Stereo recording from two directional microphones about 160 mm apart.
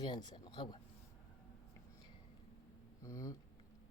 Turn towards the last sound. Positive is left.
turn(degrees=20)  # may be behind; listen again after turning